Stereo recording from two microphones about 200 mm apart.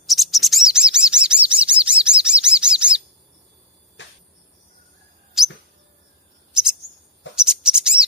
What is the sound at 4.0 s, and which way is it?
Cricket, 60° left (ahead or behind).